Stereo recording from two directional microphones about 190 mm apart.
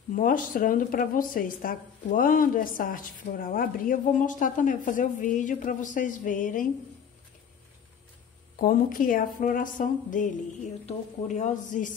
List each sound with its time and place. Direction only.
0.1 s speech: 45° left (ahead or behind)
8.5 s a woman's voice: 45° left (ahead or behind)